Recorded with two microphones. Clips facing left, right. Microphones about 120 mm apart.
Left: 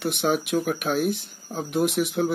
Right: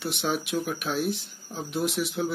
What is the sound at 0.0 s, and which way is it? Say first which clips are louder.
Speech: left 5 dB; 55° left (ahead or behind).